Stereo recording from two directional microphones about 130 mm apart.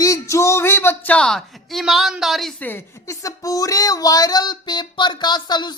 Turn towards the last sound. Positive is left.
turn(degrees=35)  # may be behind; listen again after turning